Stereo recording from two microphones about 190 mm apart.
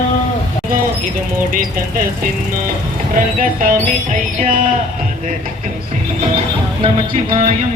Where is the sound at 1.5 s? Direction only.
45° right (ahead or behind).